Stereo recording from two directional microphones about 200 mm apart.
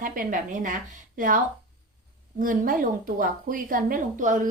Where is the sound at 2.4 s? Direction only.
45° right (ahead or behind).